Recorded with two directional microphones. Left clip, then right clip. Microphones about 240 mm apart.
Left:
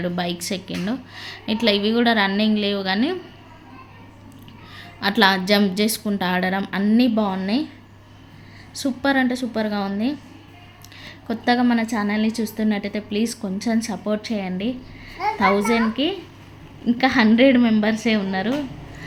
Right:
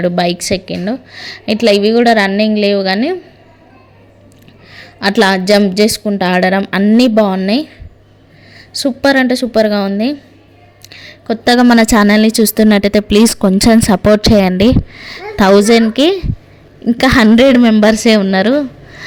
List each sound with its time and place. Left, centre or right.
0.0 s speech: right
4.7 s a woman's voice: right